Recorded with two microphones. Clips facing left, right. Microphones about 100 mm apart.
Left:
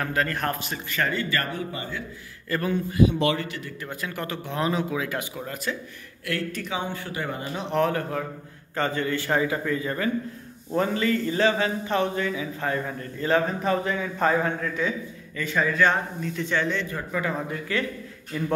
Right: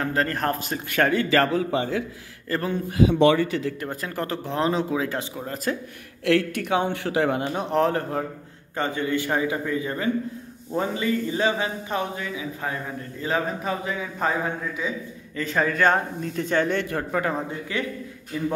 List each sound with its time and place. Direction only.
0.0 s speech: 35° right (ahead or behind)
0.8 s a man's voice: 60° right (ahead or behind); by 2.0 s 90° right
2.5 s speech: 30° right (ahead or behind)
3.8 s speech: 40° right (ahead or behind)
5.7 s speech: 45° right (ahead or behind)
6.2 s speech: 80° right
7.5 s speech: 35° right (ahead or behind)
8.7 s a man's voice: 20° right (ahead or behind)
15.3 s speech: 40° right (ahead or behind); by 17.3 s 60° right (ahead or behind)
17.3 s a man's voice: 30° right (ahead or behind)